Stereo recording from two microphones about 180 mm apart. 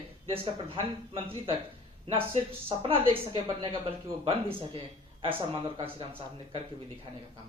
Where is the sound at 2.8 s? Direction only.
30° right (ahead or behind).